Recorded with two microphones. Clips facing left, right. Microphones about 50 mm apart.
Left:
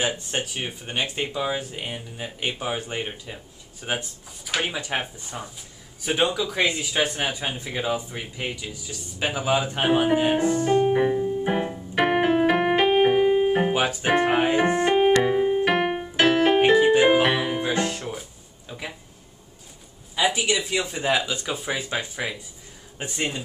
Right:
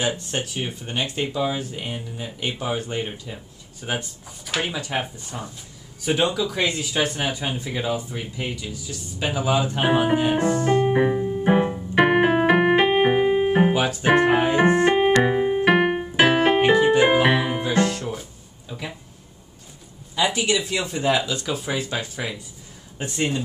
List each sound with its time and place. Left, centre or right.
0.0 s speech: centre
1.9 s speech: left
4.5 s speech: centre
4.7 s speech: centre
5.2 s speech: centre
10.8 s keyboard: centre
14.0 s music: centre
14.5 s keyboard: centre
15.2 s piano: centre
17.0 s music: centre
17.6 s music: centre
20.2 s speech: centre